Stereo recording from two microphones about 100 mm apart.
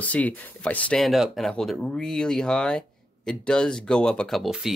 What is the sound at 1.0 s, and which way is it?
Speech, centre (ahead or behind).